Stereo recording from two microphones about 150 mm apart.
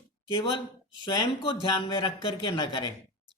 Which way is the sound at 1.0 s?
30° left (ahead or behind).